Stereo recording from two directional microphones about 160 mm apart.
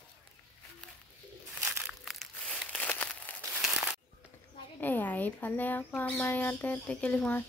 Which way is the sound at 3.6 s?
Centre (ahead or behind).